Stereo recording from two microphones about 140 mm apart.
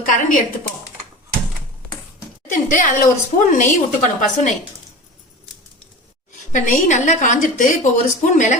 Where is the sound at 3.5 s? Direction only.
65° left (ahead or behind).